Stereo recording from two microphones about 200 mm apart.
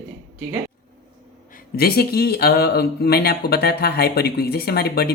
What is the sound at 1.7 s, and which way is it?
Speech, 50° left (ahead or behind).